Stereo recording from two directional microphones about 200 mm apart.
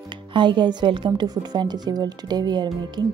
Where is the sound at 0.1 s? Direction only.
25° right (ahead or behind).